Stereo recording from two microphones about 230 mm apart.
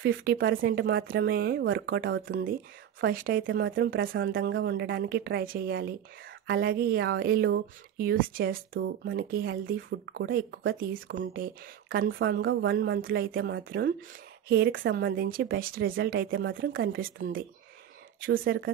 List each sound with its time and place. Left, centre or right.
0.0 s speech: right
3.1 s speech: right
3.4 s speech: right
9.8 s speech: right
10.2 s speech: right